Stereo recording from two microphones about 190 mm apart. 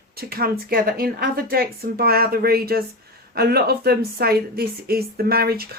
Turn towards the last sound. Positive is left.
turn(degrees=-55)  # may be behind; listen again after turning